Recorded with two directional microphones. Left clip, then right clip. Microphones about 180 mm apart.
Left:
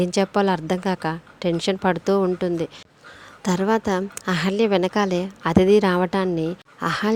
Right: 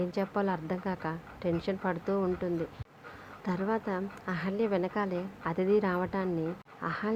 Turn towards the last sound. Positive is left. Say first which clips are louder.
# left 11 dB
turn(degrees=55)  # may be behind; listen again after turning